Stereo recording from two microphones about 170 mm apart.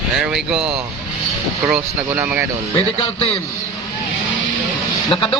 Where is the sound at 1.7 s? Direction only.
10° right (ahead or behind).